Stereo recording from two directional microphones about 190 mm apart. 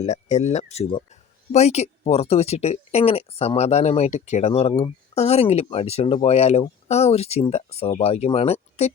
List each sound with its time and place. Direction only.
0.0 s speech: 35° left (ahead or behind)